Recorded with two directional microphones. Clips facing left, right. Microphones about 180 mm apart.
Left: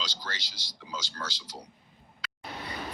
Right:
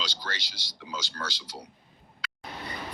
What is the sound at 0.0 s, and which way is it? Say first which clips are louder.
Speech: right 2 dB; 70° right (ahead or behind).